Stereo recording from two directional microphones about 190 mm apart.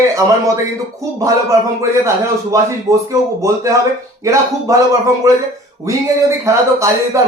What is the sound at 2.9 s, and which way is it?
Speech, 15° right (ahead or behind).